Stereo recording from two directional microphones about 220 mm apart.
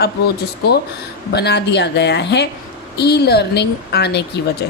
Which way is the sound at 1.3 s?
50° left (ahead or behind).